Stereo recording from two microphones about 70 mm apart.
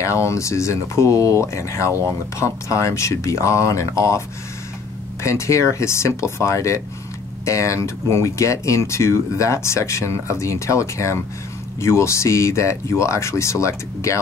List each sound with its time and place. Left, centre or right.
0.0 s speech: left
5.2 s speech: left